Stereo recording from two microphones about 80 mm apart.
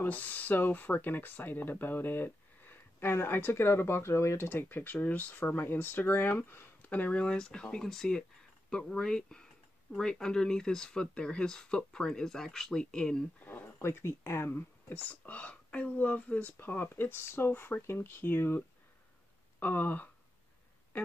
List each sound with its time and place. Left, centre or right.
0.0 s speech: left
13.4 s speech: left
19.6 s speech: left